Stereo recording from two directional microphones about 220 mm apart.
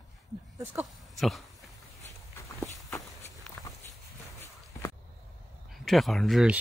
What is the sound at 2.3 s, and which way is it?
Walk, 15° left (ahead or behind).